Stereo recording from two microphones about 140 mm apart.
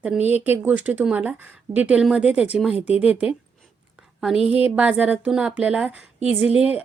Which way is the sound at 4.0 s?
5° right (ahead or behind).